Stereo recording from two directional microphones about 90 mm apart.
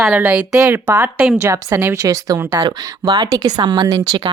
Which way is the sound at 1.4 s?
30° right (ahead or behind).